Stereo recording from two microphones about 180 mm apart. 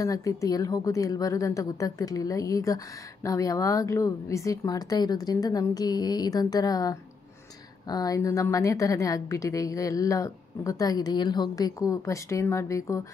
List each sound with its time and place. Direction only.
0.0 s a woman's voice: 20° left (ahead or behind)